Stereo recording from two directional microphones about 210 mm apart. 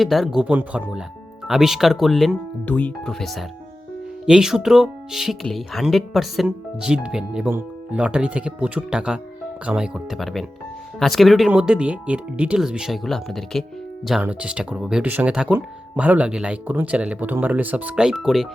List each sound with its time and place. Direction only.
0.0 s speech: centre (ahead or behind)